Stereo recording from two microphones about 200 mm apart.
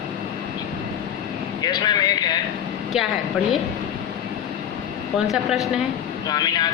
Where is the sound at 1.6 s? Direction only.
20° left (ahead or behind).